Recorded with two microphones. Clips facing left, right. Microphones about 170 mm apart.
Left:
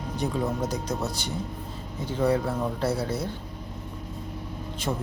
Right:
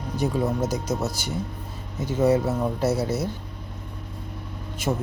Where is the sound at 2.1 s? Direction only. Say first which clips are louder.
Right 4 dB; 10° right (ahead or behind).